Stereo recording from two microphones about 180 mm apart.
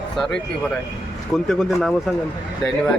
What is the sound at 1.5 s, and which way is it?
Speech, centre (ahead or behind).